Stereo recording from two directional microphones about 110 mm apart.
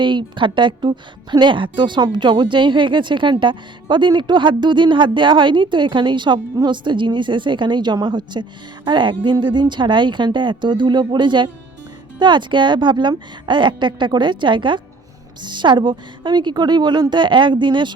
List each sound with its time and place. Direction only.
0.0 s a woman's voice: 45° right (ahead or behind)